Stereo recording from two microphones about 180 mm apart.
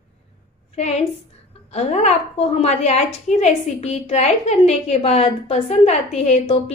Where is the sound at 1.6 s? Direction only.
35° left (ahead or behind).